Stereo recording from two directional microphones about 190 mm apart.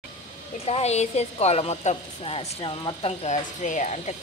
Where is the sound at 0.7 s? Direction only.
35° left (ahead or behind).